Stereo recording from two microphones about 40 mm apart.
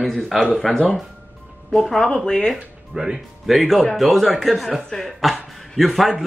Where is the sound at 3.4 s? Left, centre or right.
Centre.